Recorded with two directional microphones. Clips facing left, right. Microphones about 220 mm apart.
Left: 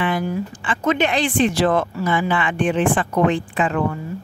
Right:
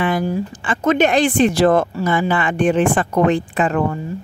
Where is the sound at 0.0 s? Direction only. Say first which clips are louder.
Right 3 dB; 40° right (ahead or behind).